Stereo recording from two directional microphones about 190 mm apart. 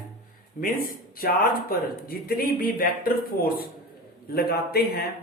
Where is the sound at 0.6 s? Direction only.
50° left (ahead or behind).